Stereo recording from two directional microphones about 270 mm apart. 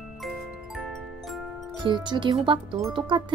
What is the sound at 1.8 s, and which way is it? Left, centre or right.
Speech, centre.